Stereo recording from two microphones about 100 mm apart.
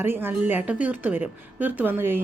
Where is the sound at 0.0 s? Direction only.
20° right (ahead or behind).